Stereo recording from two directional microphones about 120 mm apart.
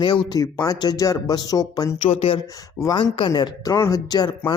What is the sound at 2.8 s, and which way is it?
Speech, 40° left (ahead or behind).